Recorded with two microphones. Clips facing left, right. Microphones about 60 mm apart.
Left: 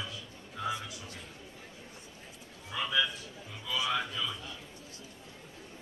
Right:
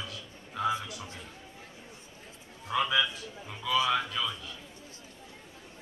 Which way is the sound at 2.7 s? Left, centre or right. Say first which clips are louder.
Right 4 dB; right.